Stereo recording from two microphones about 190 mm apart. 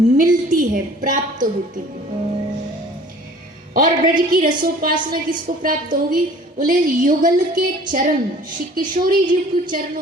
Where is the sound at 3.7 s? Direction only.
45° right (ahead or behind).